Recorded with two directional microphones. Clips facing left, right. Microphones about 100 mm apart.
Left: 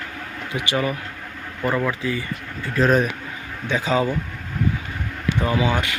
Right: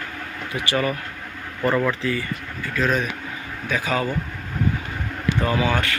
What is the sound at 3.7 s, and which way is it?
Speech, 20° left (ahead or behind).